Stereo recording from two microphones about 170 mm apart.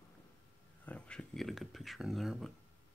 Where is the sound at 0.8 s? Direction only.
5° left (ahead or behind).